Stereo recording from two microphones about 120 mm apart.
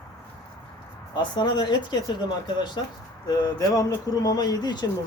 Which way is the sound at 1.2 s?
40° left (ahead or behind).